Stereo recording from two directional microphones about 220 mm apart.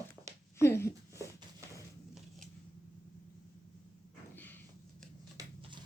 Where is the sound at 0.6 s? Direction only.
10° left (ahead or behind).